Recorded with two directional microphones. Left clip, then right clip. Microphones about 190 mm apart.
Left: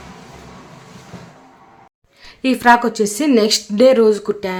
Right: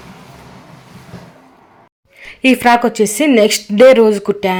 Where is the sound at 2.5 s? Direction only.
15° right (ahead or behind).